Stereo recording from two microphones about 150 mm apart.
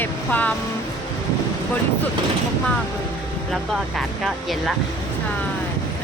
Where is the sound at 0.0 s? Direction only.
10° left (ahead or behind).